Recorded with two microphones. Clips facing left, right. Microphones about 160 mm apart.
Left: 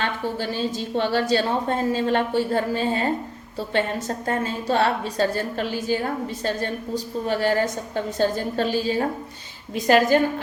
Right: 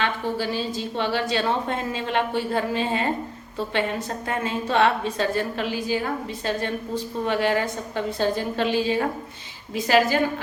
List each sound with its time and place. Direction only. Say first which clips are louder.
0.0 s a woman's voice: right 1 dB; 45° left (ahead or behind)
4.3 s a woman's voice: left 2 dB; 40° left (ahead or behind)